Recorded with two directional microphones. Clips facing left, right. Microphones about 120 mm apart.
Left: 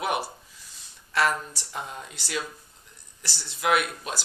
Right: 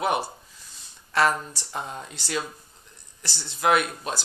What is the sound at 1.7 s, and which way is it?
Speech, 35° right (ahead or behind).